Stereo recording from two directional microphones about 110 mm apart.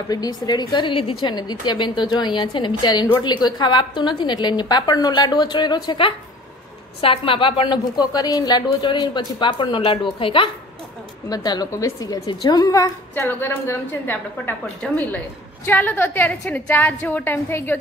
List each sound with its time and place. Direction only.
0.1 s a woman's voice: 35° left (ahead or behind)
1.3 s a woman's voice: 40° left (ahead or behind)
11.2 s a woman's voice: 40° left (ahead or behind)
12.3 s a woman's voice: 40° left (ahead or behind)
13.1 s a woman's voice: 20° left (ahead or behind)
15.6 s a woman's voice: 20° left (ahead or behind)